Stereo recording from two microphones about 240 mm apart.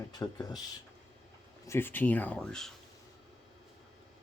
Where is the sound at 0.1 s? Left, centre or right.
Centre.